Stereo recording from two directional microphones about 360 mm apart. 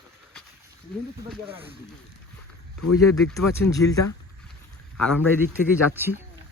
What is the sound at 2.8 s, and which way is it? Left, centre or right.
Speech, left.